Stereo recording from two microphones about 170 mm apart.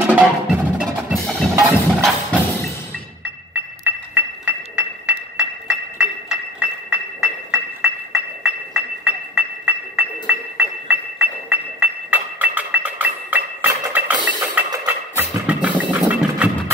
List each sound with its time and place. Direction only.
0.0 s percussion: 10° right (ahead or behind)
1.5 s percussion: 15° right (ahead or behind)
3.8 s glass: 10° right (ahead or behind)
15.1 s music: 10° right (ahead or behind)